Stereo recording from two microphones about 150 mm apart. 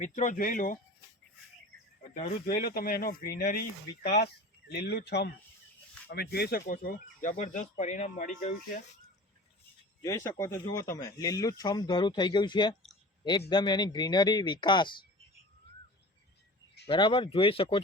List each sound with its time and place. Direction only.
0.0 s speech: 55° left (ahead or behind)
2.1 s speech: 50° left (ahead or behind)
2.5 s speech: 90° left
6.7 s speech: 60° left (ahead or behind)
10.0 s speech: 20° left (ahead or behind)
16.8 s speech: 35° left (ahead or behind)